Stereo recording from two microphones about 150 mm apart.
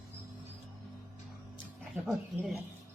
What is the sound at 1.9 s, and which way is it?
Speech, 5° right (ahead or behind).